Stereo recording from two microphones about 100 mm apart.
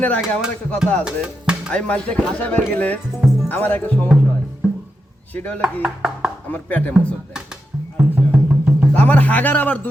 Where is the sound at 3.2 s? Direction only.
5° right (ahead or behind).